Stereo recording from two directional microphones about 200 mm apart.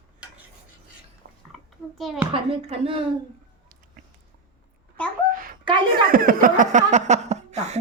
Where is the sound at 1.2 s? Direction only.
70° right (ahead or behind).